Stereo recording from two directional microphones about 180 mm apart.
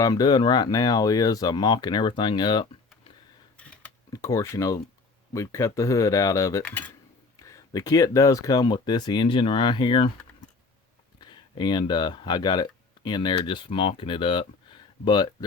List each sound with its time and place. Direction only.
0.0 s speech: 20° left (ahead or behind)
3.6 s a sound: 5° left (ahead or behind)
4.1 s speech: 20° left (ahead or behind)
11.2 s speech: 25° left (ahead or behind)